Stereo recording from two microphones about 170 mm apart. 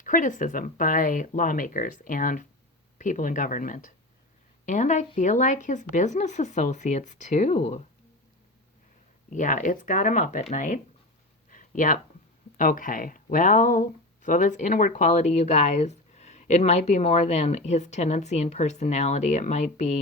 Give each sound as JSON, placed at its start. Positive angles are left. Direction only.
{"t": 0.0, "sound": "speech", "side_deg": 50}
{"t": 9.3, "sound": "speech", "side_deg": 50}
{"t": 11.5, "sound": "a sound", "side_deg": 50}
{"t": 12.5, "sound": "speech", "side_deg": 55}